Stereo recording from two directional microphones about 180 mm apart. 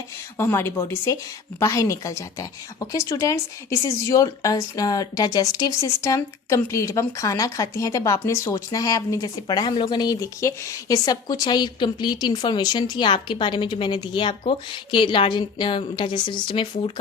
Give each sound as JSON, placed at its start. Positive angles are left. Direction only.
{"t": 0.3, "sound": "a woman's voice", "side_deg": 15}